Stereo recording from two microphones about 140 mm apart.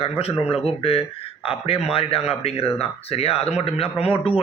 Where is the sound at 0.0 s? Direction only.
45° left (ahead or behind).